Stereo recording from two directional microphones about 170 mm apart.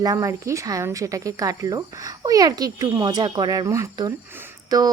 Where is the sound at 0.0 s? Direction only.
20° right (ahead or behind).